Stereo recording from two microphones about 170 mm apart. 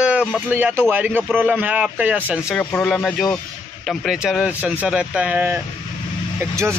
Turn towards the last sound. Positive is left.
turn(degrees=-15)  # may be behind; listen again after turning